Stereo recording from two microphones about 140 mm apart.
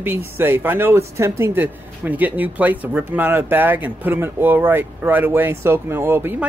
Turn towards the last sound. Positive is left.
turn(degrees=-15)  # may be behind; listen again after turning